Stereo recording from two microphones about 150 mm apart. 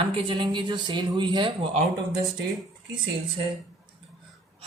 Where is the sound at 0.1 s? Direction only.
35° right (ahead or behind).